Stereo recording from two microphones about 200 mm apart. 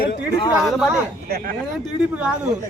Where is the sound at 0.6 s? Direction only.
5° right (ahead or behind).